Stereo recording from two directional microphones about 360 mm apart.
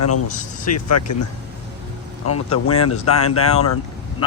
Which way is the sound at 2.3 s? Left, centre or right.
Left.